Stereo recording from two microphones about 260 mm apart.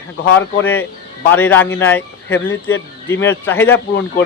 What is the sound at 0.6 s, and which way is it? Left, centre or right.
Speech, centre.